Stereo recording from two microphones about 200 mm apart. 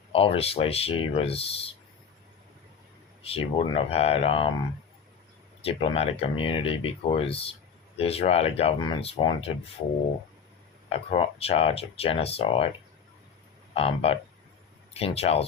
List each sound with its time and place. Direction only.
0.1 s speech: 30° left (ahead or behind)
3.2 s speech: 25° left (ahead or behind)
5.6 s speech: 30° left (ahead or behind)
10.8 s speech: 30° left (ahead or behind)
13.7 s speech: 30° left (ahead or behind)